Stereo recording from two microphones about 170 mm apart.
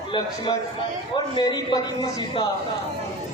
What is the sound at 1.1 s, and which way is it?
A man's voice, 25° left (ahead or behind).